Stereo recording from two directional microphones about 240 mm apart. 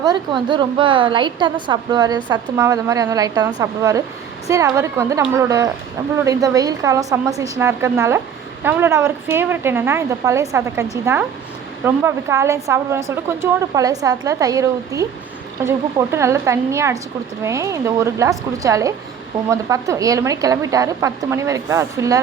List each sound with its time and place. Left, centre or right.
0.4 s a woman's voice: centre